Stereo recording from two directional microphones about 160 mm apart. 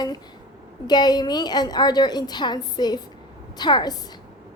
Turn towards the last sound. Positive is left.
turn(degrees=25)  # may be behind; listen again after turning